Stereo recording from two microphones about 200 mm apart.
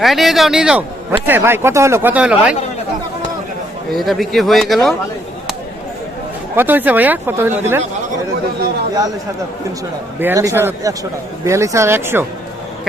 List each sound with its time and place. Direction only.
0.0 s speech: centre (ahead or behind)
3.9 s speech: centre (ahead or behind)
6.6 s speech: 10° right (ahead or behind)
10.2 s speech: 15° right (ahead or behind)